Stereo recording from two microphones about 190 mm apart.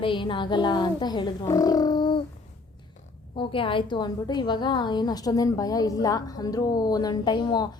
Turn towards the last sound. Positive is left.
turn(degrees=20)  # may be behind; listen again after turning